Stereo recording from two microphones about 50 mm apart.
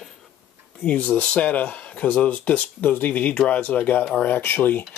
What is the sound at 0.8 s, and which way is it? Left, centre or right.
Speech, left.